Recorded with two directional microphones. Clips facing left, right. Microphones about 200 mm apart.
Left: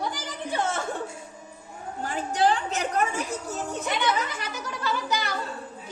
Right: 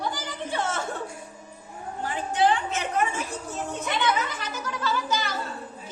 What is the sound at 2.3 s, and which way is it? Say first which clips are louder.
Speech: right 1 dB; 40° left (ahead or behind).